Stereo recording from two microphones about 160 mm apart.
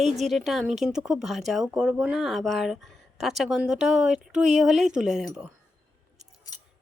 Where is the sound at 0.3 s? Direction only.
Centre (ahead or behind).